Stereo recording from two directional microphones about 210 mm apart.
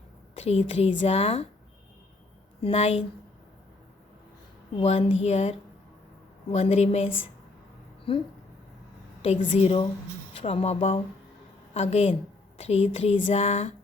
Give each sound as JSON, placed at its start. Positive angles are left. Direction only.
{"t": 0.3, "sound": "speech", "side_deg": 30}
{"t": 2.6, "sound": "speech", "side_deg": 30}
{"t": 4.8, "sound": "speech", "side_deg": 30}
{"t": 9.2, "sound": "a woman's voice", "side_deg": 25}